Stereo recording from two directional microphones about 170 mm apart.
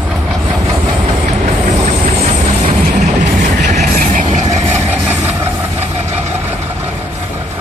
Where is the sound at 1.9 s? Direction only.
35° right (ahead or behind).